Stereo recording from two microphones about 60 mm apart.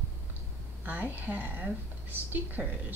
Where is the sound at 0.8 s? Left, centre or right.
Right.